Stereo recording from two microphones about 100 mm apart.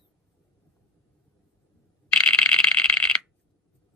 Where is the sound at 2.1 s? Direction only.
10° left (ahead or behind).